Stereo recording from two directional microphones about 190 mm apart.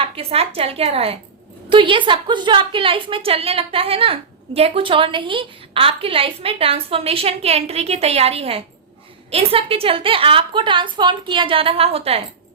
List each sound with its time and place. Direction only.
0.0 s a woman's voice: 30° right (ahead or behind)